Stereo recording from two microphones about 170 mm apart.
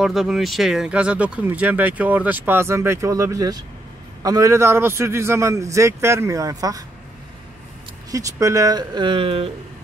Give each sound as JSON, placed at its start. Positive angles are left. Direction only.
{"t": 0.0, "sound": "speech", "side_deg": 0}
{"t": 8.1, "sound": "speech", "side_deg": -20}